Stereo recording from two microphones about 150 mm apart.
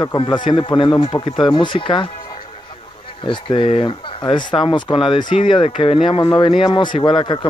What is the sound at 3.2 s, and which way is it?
Speech, 35° left (ahead or behind).